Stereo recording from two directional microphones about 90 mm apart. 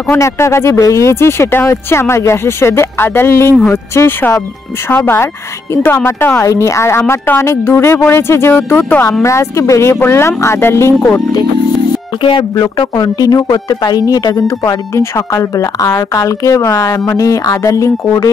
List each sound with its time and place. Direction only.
0.1 s speech: 30° left (ahead or behind)
9.2 s speech: 35° left (ahead or behind)
12.2 s speech: 70° left (ahead or behind)
12.5 s speech: 50° left (ahead or behind)